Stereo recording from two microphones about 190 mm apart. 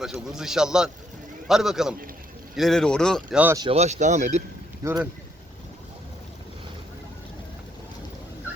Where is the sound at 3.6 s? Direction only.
35° right (ahead or behind).